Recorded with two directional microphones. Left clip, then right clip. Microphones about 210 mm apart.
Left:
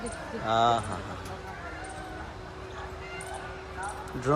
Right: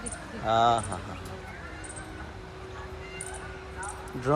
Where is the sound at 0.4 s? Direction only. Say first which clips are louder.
Right 1 dB; 5° left (ahead or behind).